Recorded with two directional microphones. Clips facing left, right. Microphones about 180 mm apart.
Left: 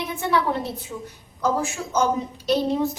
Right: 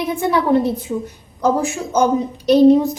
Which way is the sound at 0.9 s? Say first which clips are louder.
Right 11 dB; 30° right (ahead or behind).